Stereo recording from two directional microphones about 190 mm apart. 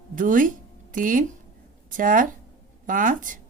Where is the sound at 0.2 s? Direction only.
45° right (ahead or behind).